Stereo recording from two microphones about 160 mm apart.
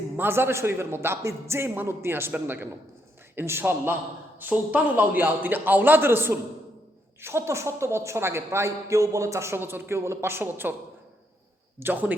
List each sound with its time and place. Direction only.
0.2 s a man's voice: 15° right (ahead or behind)
11.8 s a man's voice: 10° right (ahead or behind)